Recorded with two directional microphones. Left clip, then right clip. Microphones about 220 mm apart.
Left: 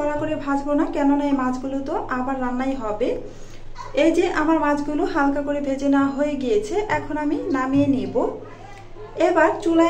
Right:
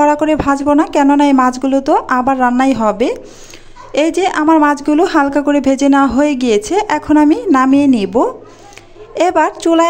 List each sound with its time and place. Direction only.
0.0 s speech: 50° right (ahead or behind)
9.2 s speech: 55° right (ahead or behind)